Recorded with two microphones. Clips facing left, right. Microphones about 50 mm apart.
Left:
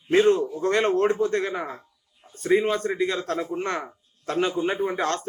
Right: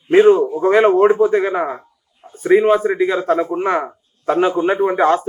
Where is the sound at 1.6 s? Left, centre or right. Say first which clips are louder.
Right 11 dB; right.